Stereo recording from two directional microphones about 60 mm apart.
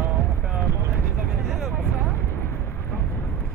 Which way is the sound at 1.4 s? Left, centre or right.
Centre.